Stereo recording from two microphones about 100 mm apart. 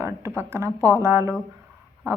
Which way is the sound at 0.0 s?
30° right (ahead or behind).